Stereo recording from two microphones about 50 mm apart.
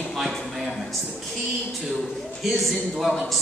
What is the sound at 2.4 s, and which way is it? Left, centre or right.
A man's voice, centre.